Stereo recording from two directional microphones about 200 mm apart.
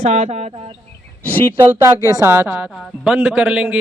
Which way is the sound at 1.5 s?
10° right (ahead or behind).